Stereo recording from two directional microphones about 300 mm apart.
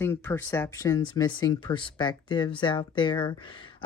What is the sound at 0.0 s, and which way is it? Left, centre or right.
Speech, centre.